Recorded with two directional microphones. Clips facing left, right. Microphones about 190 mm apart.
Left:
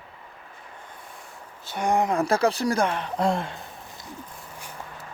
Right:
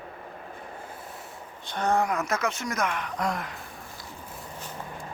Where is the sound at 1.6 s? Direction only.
10° left (ahead or behind).